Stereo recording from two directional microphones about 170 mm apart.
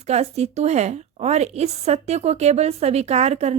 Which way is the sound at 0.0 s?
40° right (ahead or behind).